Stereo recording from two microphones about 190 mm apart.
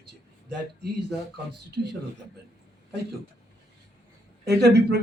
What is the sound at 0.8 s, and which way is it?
Speech, 60° right (ahead or behind).